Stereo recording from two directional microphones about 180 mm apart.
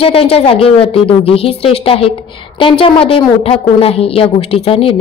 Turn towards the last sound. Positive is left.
turn(degrees=30)  # may be behind; listen again after turning